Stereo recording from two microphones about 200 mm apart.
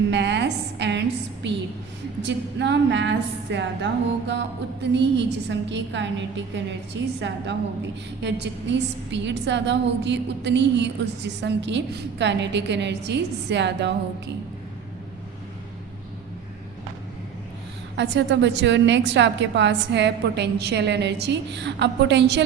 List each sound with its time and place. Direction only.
0.1 s a sound: 60° right (ahead or behind)
2.2 s a woman's voice: 60° right (ahead or behind)
17.9 s a woman's voice: 60° right (ahead or behind)